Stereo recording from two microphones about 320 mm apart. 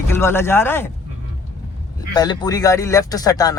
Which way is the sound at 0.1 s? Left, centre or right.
Centre.